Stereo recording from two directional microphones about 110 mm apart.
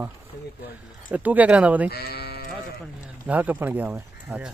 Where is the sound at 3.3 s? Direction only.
15° right (ahead or behind).